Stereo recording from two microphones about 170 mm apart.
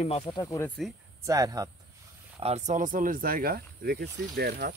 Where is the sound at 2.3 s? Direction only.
40° right (ahead or behind).